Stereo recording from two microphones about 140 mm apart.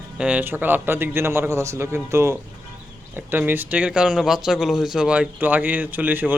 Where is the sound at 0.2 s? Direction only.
10° right (ahead or behind).